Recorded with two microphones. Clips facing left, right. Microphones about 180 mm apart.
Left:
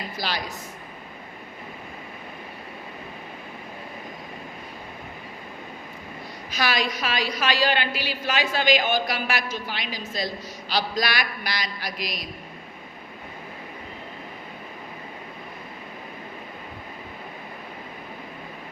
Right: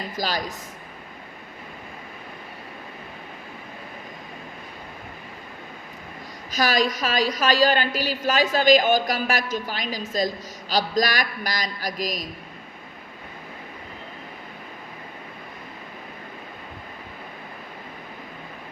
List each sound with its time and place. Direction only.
0.2 s a woman's voice: 40° right (ahead or behind)
6.5 s a woman's voice: 40° right (ahead or behind)